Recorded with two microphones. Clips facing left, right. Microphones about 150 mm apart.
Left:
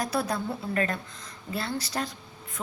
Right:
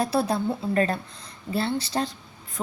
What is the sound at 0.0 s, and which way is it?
A woman's voice, 30° right (ahead or behind).